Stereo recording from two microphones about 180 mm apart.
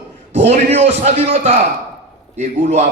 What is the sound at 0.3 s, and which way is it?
A man's voice, 40° right (ahead or behind).